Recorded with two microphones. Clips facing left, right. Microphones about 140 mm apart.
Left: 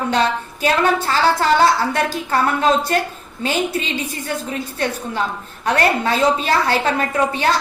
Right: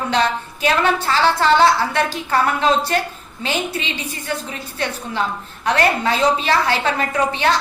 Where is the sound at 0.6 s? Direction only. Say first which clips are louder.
Left 1 dB; 40° left (ahead or behind).